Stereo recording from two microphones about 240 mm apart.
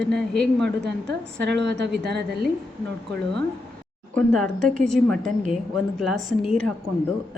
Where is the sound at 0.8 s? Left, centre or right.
Right.